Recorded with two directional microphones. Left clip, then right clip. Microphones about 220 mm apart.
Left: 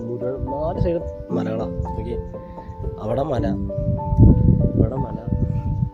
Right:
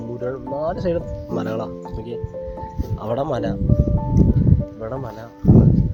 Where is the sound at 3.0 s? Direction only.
10° left (ahead or behind).